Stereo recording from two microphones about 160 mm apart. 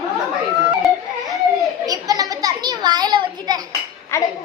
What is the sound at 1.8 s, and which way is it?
Children playing, 20° right (ahead or behind).